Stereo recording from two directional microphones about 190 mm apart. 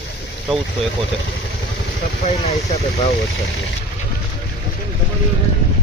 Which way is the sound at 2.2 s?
35° left (ahead or behind).